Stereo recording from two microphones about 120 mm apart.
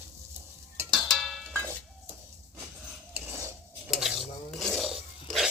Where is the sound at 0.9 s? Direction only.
Centre (ahead or behind).